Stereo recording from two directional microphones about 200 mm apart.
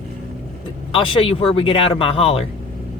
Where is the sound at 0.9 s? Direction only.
25° left (ahead or behind).